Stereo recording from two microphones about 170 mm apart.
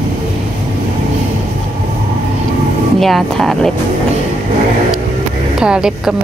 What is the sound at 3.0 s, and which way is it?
Speech, centre (ahead or behind).